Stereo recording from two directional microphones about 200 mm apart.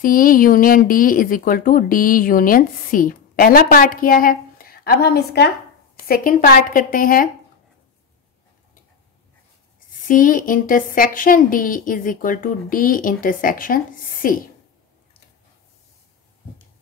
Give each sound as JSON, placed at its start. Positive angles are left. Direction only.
{"t": 0.0, "sound": "speech", "side_deg": 45}
{"t": 10.0, "sound": "speech", "side_deg": 40}